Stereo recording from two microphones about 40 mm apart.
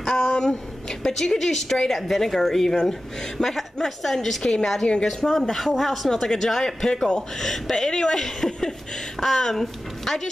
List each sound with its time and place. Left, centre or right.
0.0 s a sound: centre
0.4 s a woman's voice: centre
4.4 s a woman's voice: centre